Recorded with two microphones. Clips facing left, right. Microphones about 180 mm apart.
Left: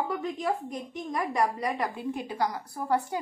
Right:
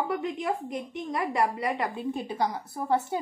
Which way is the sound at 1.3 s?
5° right (ahead or behind).